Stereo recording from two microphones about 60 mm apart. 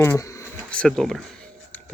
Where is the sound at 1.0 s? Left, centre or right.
Centre.